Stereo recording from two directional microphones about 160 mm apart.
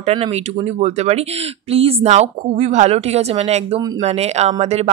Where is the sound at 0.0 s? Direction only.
40° right (ahead or behind).